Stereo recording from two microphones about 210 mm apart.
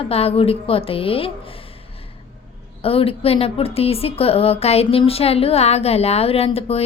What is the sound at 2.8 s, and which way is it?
A woman's voice, 25° left (ahead or behind).